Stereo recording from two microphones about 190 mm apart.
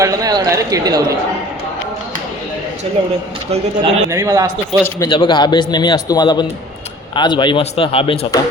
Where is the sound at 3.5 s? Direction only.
30° right (ahead or behind).